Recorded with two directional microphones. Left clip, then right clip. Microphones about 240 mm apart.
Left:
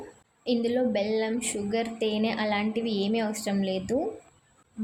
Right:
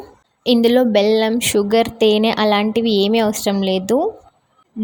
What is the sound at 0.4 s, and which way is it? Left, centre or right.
A woman's voice, right.